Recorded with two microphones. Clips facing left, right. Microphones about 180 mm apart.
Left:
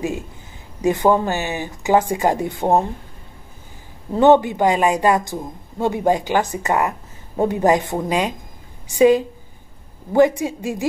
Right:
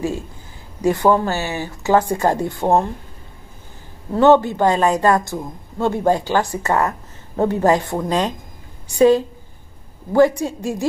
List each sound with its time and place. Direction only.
0.8 s a woman's voice: 20° left (ahead or behind)
4.1 s a woman's voice: 15° left (ahead or behind)